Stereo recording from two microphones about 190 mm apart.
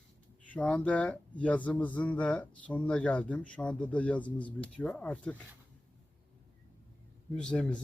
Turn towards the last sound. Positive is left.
turn(degrees=5)  # may be behind; listen again after turning